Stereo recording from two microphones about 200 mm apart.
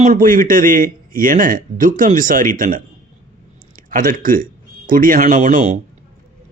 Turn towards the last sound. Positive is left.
turn(degrees=-40)  # may be behind; listen again after turning